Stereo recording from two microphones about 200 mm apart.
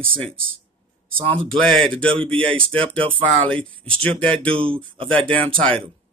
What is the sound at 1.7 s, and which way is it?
Speech, 5° left (ahead or behind).